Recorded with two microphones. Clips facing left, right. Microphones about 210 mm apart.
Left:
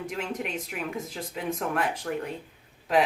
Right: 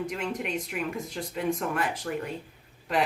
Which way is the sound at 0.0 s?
Centre (ahead or behind).